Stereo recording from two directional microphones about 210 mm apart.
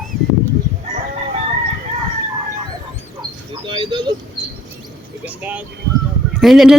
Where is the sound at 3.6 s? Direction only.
20° right (ahead or behind).